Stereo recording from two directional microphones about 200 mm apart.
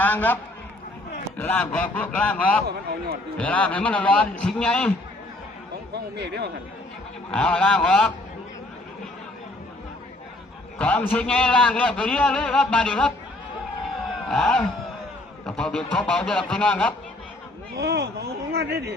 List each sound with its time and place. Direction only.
0.0 s a man's voice: 10° left (ahead or behind)
1.4 s a man's voice: 5° left (ahead or behind)
5.9 s speech: 55° right (ahead or behind)
7.3 s a man's voice: 5° left (ahead or behind)
10.8 s a man's voice: 5° left (ahead or behind)
14.3 s a man's voice: centre (ahead or behind)
17.7 s speech: 55° right (ahead or behind)